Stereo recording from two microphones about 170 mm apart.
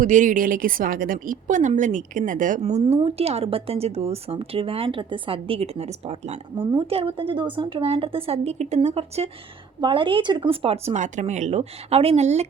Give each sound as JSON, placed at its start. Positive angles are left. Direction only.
{"t": 0.0, "sound": "a woman's voice", "side_deg": -50}